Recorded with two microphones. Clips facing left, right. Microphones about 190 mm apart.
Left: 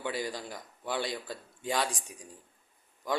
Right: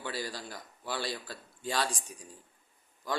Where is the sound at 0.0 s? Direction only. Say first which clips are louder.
Left 3 dB; 20° left (ahead or behind).